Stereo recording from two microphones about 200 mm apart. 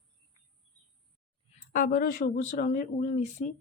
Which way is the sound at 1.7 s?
45° left (ahead or behind).